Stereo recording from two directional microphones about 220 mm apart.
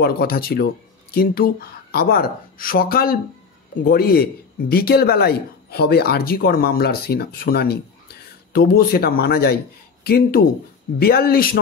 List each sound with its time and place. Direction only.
0.0 s a man's voice: 45° left (ahead or behind)